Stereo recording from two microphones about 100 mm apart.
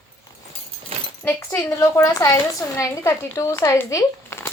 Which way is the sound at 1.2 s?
25° left (ahead or behind).